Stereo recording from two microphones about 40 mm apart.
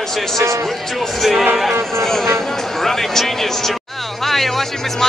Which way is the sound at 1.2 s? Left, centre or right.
Centre.